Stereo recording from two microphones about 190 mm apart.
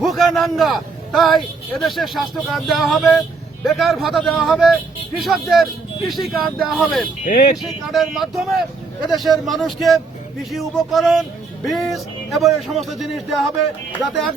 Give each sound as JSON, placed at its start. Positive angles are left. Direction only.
{"t": 0.0, "sound": "a man's voice", "side_deg": 0}
{"t": 7.3, "sound": "speech", "side_deg": 45}
{"t": 7.5, "sound": "speech", "side_deg": 0}